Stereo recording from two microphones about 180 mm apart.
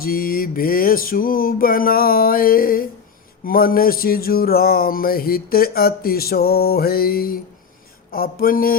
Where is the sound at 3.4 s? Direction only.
55° left (ahead or behind).